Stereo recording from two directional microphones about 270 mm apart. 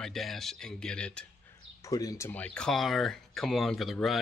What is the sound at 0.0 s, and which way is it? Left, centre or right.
Speech, centre.